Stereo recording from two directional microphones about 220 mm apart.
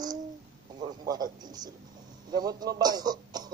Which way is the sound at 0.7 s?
20° right (ahead or behind).